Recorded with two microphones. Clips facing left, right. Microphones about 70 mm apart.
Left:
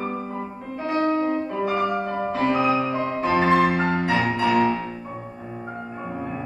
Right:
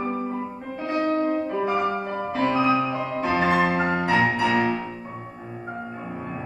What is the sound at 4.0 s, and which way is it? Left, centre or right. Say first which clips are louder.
Music: right 1 dB; centre.